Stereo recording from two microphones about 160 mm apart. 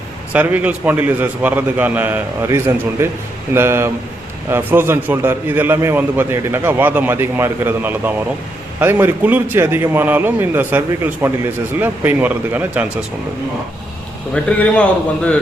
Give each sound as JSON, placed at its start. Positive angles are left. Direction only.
{"t": 0.3, "sound": "a man's voice", "side_deg": -10}
{"t": 14.3, "sound": "a man's voice", "side_deg": 5}